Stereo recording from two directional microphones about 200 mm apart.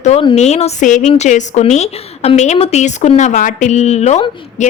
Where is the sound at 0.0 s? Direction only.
30° left (ahead or behind).